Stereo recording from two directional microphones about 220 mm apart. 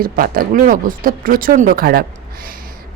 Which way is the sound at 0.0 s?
40° right (ahead or behind).